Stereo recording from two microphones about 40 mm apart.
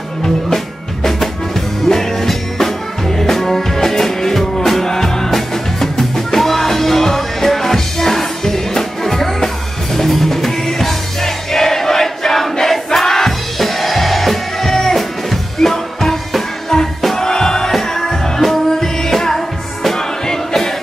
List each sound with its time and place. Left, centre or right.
1.9 s music: centre